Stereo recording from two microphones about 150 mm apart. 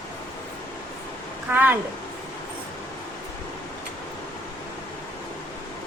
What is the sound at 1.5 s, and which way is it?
Speech, 10° right (ahead or behind).